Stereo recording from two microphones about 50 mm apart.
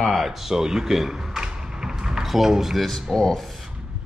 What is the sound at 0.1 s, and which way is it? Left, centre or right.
Speech, centre.